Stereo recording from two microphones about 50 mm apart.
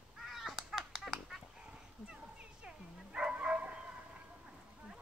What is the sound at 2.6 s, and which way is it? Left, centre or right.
Dog, centre.